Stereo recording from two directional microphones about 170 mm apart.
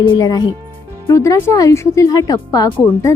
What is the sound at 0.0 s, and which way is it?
A woman's voice, 20° left (ahead or behind).